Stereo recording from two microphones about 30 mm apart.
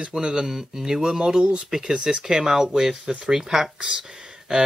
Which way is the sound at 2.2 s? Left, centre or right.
Centre.